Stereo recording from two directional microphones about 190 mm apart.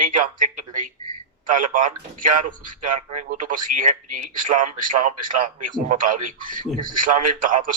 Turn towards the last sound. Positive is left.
turn(degrees=-45)  # may be behind; listen again after turning